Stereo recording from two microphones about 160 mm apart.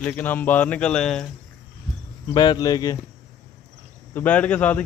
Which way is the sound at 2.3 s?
25° left (ahead or behind).